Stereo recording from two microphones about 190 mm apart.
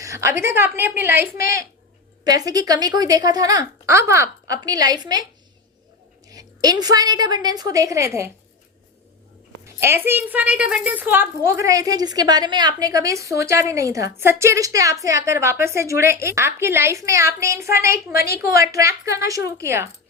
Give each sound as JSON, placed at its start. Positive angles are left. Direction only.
{"t": 0.0, "sound": "a woman's voice", "side_deg": -15}
{"t": 1.4, "sound": "a woman's voice", "side_deg": 50}
{"t": 2.2, "sound": "a woman's voice", "side_deg": -20}
{"t": 6.2, "sound": "a woman's voice", "side_deg": -20}
{"t": 9.8, "sound": "a woman's voice", "side_deg": -10}